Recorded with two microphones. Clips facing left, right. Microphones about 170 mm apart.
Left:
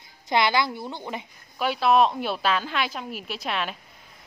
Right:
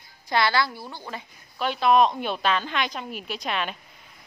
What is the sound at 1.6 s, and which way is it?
A woman's voice, 5° left (ahead or behind).